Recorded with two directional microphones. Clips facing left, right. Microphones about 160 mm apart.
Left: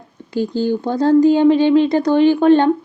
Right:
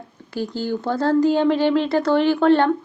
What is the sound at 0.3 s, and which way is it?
Speech, 15° left (ahead or behind).